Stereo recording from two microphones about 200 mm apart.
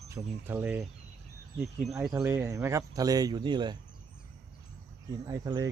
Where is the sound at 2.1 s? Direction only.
15° right (ahead or behind).